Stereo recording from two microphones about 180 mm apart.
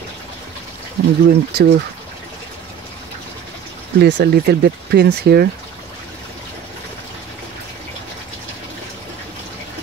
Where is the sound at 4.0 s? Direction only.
65° right (ahead or behind).